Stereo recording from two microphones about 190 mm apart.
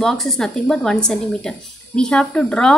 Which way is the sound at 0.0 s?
Centre (ahead or behind).